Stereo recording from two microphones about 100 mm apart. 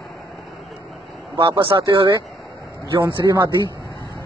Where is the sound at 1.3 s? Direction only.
55° right (ahead or behind); by 3.6 s 40° right (ahead or behind).